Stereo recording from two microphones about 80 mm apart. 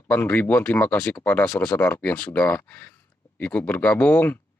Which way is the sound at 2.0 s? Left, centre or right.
Centre.